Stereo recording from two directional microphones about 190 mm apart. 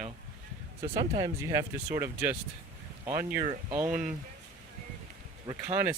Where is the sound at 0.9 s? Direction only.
20° right (ahead or behind).